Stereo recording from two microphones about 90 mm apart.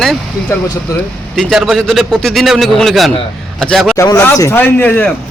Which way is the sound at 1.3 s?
Centre (ahead or behind).